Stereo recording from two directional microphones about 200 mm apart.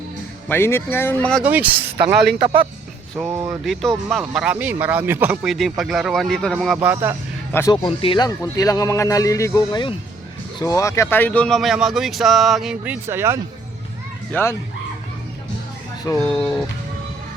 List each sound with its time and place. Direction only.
0.4 s a man's voice: 10° left (ahead or behind)
1.5 s speech: 10° right (ahead or behind)
3.2 s speech: 15° right (ahead or behind)
3.6 s speech: centre (ahead or behind)
6.7 s speech: 10° right (ahead or behind)
7.5 s a man's voice: 15° left (ahead or behind)
7.9 s a man's voice: 25° left (ahead or behind); by 13.4 s 15° right (ahead or behind)
14.3 s a man's voice: 10° left (ahead or behind)
16.1 s a man's voice: 15° left (ahead or behind)